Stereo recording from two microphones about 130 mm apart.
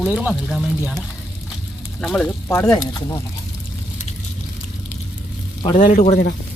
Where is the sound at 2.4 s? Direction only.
20° left (ahead or behind).